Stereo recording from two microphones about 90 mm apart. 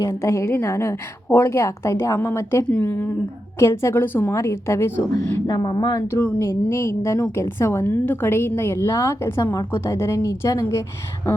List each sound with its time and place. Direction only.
0.0 s a woman's voice: 35° left (ahead or behind)
4.4 s a woman's voice: 35° left (ahead or behind)
5.5 s speech: 50° left (ahead or behind)
6.1 s a woman's voice: 30° left (ahead or behind)